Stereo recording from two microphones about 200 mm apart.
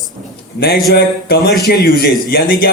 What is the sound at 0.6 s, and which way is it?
Speech, 50° left (ahead or behind).